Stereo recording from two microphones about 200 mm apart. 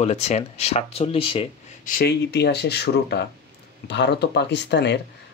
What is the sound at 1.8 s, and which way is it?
Speech, 55° left (ahead or behind).